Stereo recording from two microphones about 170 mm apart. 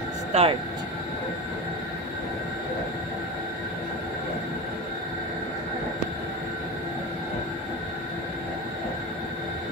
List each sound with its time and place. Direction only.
0.3 s speech: 35° right (ahead or behind)